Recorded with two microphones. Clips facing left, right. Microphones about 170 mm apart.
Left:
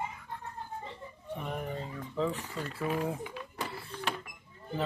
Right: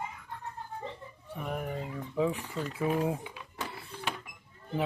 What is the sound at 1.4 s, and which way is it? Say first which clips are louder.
Speech: right 3 dB; 5° right (ahead or behind).